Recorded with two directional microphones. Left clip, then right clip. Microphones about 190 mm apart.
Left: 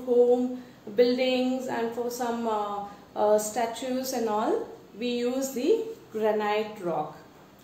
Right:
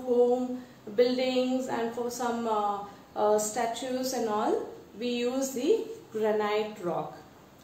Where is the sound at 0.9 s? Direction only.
15° left (ahead or behind).